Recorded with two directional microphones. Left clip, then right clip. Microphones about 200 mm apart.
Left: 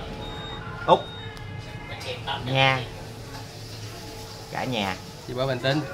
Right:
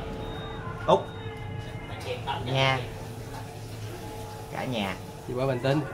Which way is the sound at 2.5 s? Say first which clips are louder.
Left 4 dB; 35° left (ahead or behind).